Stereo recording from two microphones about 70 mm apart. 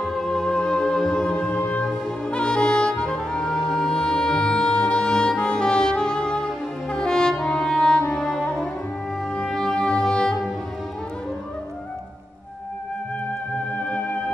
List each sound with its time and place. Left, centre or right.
0.0 s music: centre
13.7 s music: centre